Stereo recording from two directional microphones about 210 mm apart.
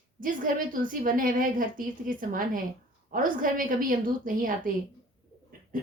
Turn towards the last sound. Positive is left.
turn(degrees=-40)  # may be behind; listen again after turning